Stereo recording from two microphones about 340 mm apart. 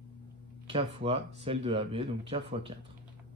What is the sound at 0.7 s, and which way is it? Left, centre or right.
Speech, centre.